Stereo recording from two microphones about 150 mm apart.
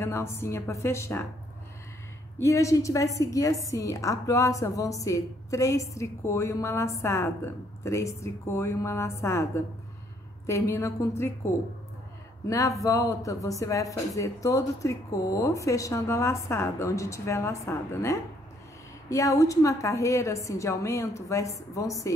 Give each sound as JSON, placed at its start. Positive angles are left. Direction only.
{"t": 0.0, "sound": "a woman's voice", "side_deg": 20}
{"t": 2.3, "sound": "a woman's voice", "side_deg": 20}
{"t": 12.4, "sound": "a woman's voice", "side_deg": 20}